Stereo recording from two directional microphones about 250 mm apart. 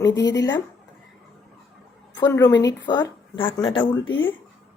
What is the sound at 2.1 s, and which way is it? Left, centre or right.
A woman's voice, centre.